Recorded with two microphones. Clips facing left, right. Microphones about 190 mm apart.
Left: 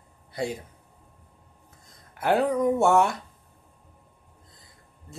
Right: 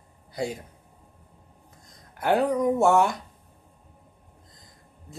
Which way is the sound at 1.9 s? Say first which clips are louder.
Even; centre (ahead or behind).